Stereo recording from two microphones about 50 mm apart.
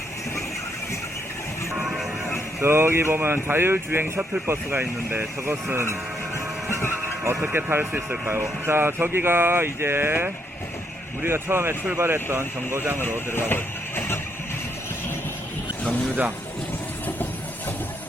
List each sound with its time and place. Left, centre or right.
1.7 s vehicle: centre
2.6 s speech: right
5.7 s speech: right
6.7 s speech: left
7.4 s speech: right
7.9 s speech: right
8.4 s speech: right
11.9 s speech: right
13.0 s speech: left